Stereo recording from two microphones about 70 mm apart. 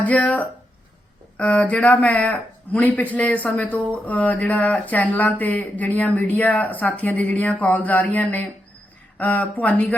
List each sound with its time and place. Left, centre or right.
0.0 s speech: left